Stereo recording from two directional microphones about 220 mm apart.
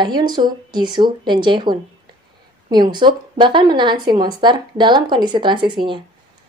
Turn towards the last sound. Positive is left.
turn(degrees=-20)  # may be behind; listen again after turning